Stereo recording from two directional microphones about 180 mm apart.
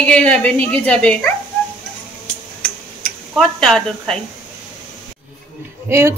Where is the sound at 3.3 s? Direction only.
Centre (ahead or behind).